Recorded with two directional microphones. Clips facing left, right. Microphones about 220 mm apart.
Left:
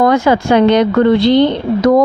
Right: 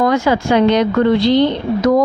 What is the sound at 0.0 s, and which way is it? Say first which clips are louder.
A woman's voice: left 3 dB; 55° left (ahead or behind).